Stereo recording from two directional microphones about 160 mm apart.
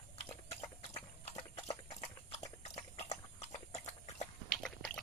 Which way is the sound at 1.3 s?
40° left (ahead or behind).